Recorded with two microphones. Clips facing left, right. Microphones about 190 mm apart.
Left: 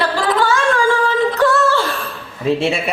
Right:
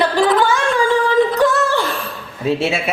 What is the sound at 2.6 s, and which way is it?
Speech, 5° right (ahead or behind).